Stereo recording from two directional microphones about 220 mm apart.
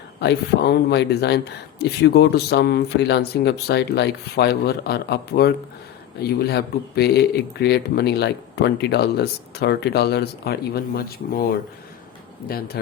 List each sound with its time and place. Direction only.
0.2 s speech: 50° left (ahead or behind)
12.5 s speech: 45° left (ahead or behind)